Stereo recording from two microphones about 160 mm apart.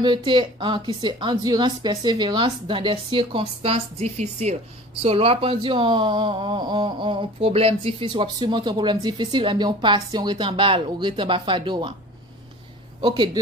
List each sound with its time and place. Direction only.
0.0 s a woman's voice: 30° right (ahead or behind)
13.0 s speech: 30° right (ahead or behind)